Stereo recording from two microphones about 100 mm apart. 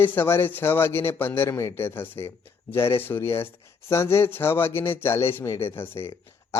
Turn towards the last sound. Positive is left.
turn(degrees=25)  # may be behind; listen again after turning